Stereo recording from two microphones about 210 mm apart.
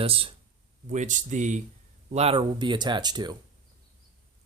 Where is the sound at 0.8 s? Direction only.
35° right (ahead or behind); by 3.3 s 20° right (ahead or behind).